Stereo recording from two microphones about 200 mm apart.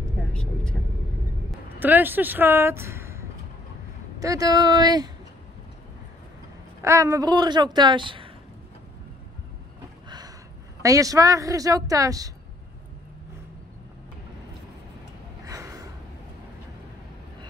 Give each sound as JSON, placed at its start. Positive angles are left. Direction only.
{"t": 0.3, "sound": "speech", "side_deg": 5}
{"t": 1.8, "sound": "speech", "side_deg": -10}
{"t": 6.8, "sound": "speech", "side_deg": -15}
{"t": 10.0, "sound": "a sound", "side_deg": -20}
{"t": 10.8, "sound": "a woman's voice", "side_deg": -15}
{"t": 15.4, "sound": "gasp", "side_deg": -15}